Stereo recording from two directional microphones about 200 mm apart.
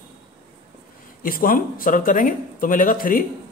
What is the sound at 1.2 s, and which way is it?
Speech, 45° left (ahead or behind).